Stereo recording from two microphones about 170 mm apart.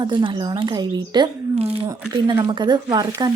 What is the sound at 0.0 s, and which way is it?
A woman's voice, 30° right (ahead or behind).